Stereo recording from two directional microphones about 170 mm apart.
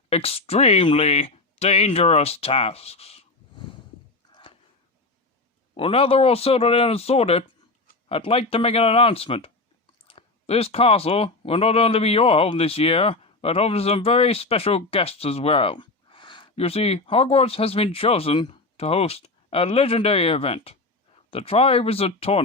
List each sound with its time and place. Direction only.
0.1 s speech: 35° left (ahead or behind)
4.3 s a sound: 30° left (ahead or behind)
5.7 s speech: 35° left (ahead or behind)